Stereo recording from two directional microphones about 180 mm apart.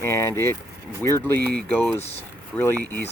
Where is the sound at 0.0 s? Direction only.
15° left (ahead or behind).